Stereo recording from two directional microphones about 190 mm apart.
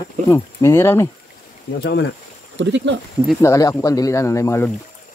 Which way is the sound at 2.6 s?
70° right (ahead or behind).